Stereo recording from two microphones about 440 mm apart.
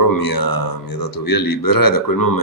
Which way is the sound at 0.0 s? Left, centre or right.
Left.